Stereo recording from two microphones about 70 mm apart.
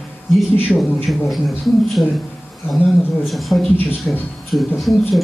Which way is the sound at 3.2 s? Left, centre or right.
Centre.